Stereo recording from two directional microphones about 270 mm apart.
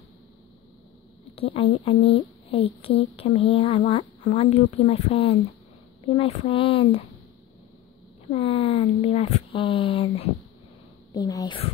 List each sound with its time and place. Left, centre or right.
1.3 s speech: centre
8.3 s speech: left